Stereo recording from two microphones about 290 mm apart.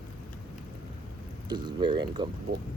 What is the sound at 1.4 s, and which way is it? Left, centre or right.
Speech, centre.